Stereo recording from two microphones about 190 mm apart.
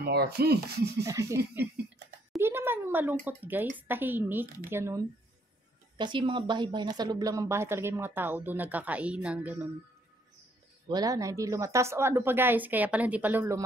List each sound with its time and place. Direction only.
0.0 s speech: 55° right (ahead or behind)
1.0 s speech: 15° right (ahead or behind)
2.3 s a sound: 10° right (ahead or behind)
3.7 s speech: 10° right (ahead or behind)
5.9 s speech: 25° right (ahead or behind); by 9.7 s 10° right (ahead or behind)
10.9 s speech: 20° right (ahead or behind)